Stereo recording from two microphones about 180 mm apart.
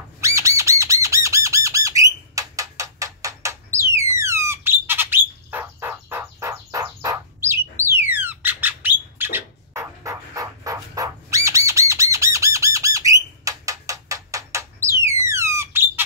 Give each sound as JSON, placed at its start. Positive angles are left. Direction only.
{"t": 0.2, "sound": "bird", "side_deg": -15}
{"t": 11.9, "sound": "squawk", "side_deg": -15}